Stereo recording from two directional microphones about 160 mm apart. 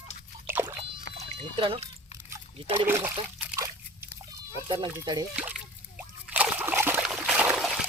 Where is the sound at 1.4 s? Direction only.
35° right (ahead or behind).